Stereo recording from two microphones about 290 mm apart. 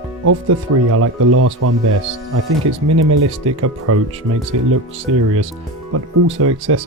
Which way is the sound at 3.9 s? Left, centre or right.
Right.